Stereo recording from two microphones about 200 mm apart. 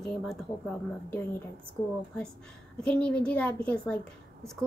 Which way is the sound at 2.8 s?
5° left (ahead or behind).